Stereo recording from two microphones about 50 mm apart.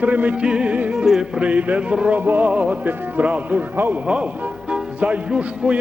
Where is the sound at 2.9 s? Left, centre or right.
Right.